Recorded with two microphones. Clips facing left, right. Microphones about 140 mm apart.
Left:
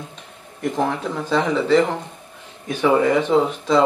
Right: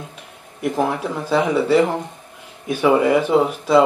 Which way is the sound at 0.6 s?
10° right (ahead or behind).